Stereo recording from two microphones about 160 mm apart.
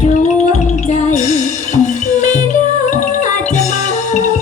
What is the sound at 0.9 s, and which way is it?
Music, 45° left (ahead or behind).